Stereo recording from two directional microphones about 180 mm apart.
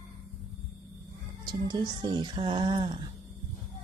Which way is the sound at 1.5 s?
25° right (ahead or behind).